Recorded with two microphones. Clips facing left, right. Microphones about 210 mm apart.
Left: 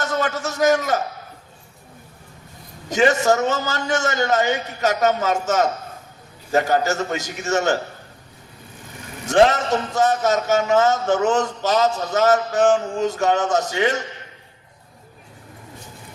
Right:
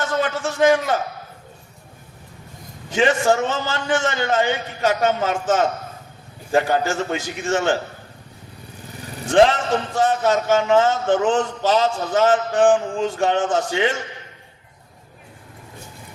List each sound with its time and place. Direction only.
0.0 s a man's voice: 40° left (ahead or behind)
2.9 s a man's voice: 40° left (ahead or behind)
9.2 s a man's voice: 40° left (ahead or behind)